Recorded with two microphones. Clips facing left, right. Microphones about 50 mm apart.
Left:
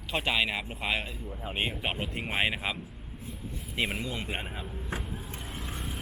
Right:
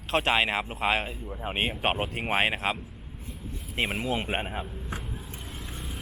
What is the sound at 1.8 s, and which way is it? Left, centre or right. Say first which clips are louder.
Speech: right 6 dB; right.